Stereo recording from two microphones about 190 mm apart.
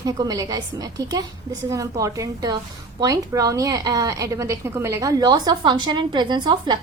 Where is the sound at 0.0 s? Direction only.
20° right (ahead or behind).